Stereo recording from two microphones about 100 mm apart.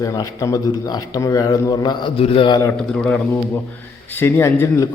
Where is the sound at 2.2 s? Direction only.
65° left (ahead or behind).